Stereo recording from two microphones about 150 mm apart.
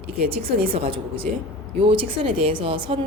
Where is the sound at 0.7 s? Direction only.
35° right (ahead or behind).